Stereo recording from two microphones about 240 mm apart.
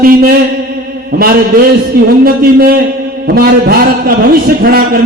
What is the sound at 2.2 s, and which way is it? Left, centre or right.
A man's voice, right.